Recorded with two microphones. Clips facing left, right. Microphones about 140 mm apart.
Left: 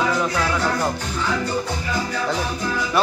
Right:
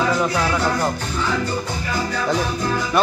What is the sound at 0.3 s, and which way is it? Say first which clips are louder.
Music: right 2 dB; 5° right (ahead or behind).